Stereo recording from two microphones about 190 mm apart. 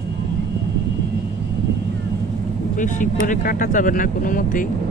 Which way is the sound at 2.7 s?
40° left (ahead or behind).